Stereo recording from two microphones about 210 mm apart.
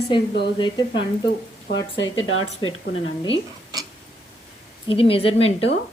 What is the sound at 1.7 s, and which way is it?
Speech, 65° left (ahead or behind).